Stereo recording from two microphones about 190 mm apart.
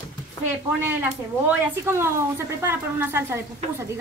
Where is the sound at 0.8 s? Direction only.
10° right (ahead or behind).